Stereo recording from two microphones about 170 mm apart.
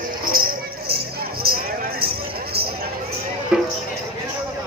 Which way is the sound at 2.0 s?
65° right (ahead or behind).